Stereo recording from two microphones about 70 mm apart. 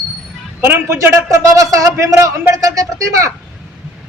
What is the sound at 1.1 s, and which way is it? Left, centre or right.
A man's voice, right.